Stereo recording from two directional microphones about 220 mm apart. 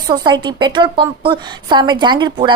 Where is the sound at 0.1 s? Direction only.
20° right (ahead or behind).